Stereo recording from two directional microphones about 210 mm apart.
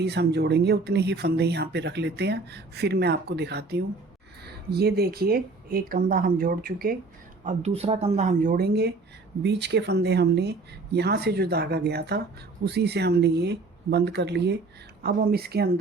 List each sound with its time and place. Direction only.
0.0 s speech: 50° right (ahead or behind)
7.4 s speech: 30° right (ahead or behind); by 15.7 s 50° right (ahead or behind)